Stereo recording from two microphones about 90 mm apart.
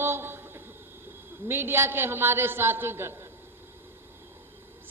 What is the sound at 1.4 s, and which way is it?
A man's voice, 25° right (ahead or behind).